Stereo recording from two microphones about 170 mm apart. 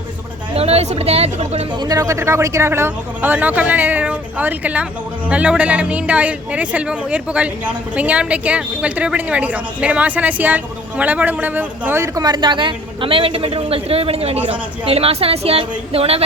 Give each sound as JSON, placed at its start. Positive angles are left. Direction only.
{"t": 0.5, "sound": "speech", "side_deg": -35}
{"t": 1.8, "sound": "a woman's voice", "side_deg": -20}